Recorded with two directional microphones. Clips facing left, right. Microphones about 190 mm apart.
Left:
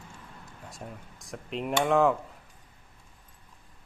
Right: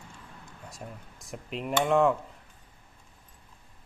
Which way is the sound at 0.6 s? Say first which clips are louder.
Left 1 dB; centre (ahead or behind).